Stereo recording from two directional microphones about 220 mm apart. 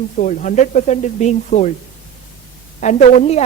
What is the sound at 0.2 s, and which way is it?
Speech, 35° left (ahead or behind).